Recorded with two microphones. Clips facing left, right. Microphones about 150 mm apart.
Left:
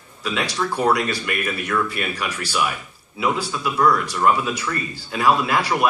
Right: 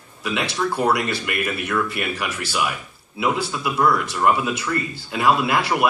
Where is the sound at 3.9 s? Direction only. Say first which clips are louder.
Left 1 dB; 25° right (ahead or behind).